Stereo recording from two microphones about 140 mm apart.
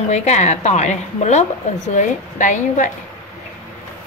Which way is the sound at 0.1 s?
55° left (ahead or behind).